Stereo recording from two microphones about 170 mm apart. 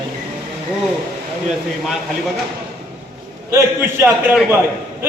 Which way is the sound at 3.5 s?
15° right (ahead or behind).